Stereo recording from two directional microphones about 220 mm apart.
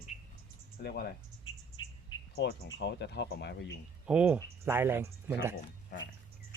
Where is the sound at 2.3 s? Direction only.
50° left (ahead or behind).